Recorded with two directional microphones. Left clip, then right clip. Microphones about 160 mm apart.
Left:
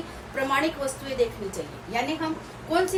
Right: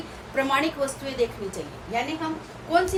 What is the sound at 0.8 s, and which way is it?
Speech, 30° right (ahead or behind).